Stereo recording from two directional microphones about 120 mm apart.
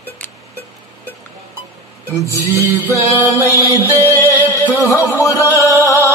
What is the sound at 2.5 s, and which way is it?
Music, 25° right (ahead or behind).